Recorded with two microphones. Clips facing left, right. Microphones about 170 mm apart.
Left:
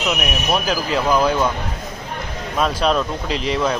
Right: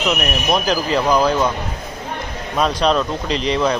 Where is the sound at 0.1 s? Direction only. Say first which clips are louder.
Right 2 dB; 5° left (ahead or behind).